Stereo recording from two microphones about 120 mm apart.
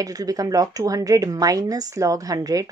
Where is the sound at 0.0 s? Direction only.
30° right (ahead or behind).